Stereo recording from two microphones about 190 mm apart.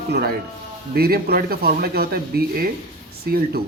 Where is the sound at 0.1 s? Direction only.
60° right (ahead or behind).